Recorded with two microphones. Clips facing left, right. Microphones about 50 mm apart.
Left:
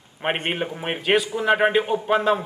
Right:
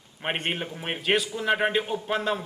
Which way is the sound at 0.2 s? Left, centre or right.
Centre.